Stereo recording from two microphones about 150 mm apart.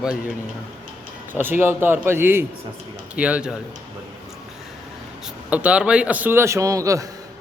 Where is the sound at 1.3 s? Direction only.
15° right (ahead or behind).